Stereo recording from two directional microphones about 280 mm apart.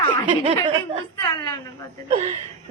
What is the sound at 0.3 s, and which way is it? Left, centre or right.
Speech, centre.